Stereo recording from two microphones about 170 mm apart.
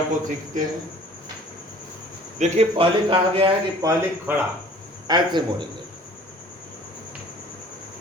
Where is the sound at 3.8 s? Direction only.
15° right (ahead or behind).